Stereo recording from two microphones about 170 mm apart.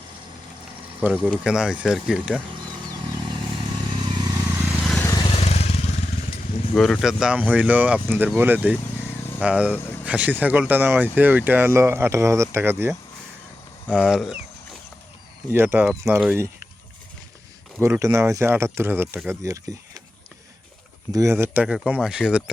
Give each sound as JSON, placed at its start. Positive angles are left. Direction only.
{"t": 1.0, "sound": "speech", "side_deg": -10}
{"t": 2.9, "sound": "vehicle", "side_deg": -30}
{"t": 4.4, "sound": "vehicle", "side_deg": 0}
{"t": 5.0, "sound": "vehicle", "side_deg": 25}
{"t": 6.7, "sound": "speech", "side_deg": 0}
{"t": 13.9, "sound": "speech", "side_deg": 0}
{"t": 15.5, "sound": "speech", "side_deg": -10}
{"t": 17.7, "sound": "speech", "side_deg": -15}
{"t": 21.1, "sound": "speech", "side_deg": -20}